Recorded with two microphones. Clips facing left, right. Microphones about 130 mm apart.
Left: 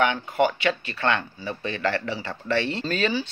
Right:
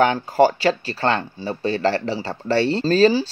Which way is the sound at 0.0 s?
35° right (ahead or behind).